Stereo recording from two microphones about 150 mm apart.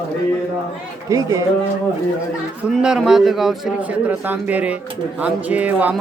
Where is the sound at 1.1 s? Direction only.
20° right (ahead or behind).